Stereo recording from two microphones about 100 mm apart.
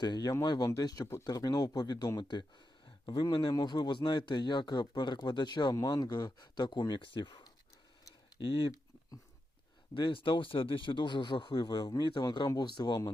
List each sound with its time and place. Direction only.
0.0 s speech: 45° left (ahead or behind)
9.9 s speech: 60° left (ahead or behind)